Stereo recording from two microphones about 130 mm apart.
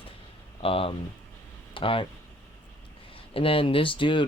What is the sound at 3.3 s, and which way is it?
Speech, 45° left (ahead or behind).